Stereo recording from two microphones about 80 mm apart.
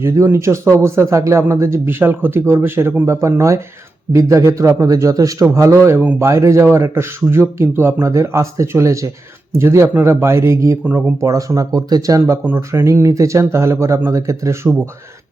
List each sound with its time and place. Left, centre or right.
0.0 s speech: right
12.5 s speech: right